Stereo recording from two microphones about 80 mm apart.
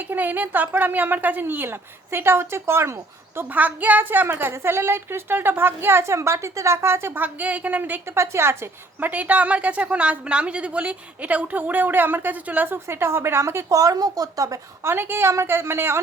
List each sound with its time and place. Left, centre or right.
0.1 s a woman's voice: right
3.3 s a woman's voice: right
8.1 s a woman's voice: right
13.7 s a woman's voice: right
14.8 s a woman's voice: right